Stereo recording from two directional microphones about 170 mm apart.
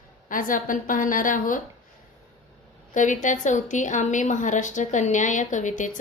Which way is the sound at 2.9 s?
50° left (ahead or behind).